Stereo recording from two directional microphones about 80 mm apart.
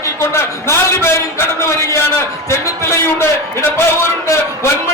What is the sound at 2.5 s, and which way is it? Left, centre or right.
Music, left.